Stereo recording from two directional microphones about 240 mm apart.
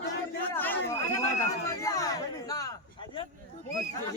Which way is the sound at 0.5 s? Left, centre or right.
Centre.